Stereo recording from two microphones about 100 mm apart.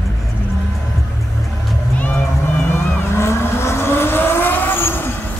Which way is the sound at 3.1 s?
25° left (ahead or behind).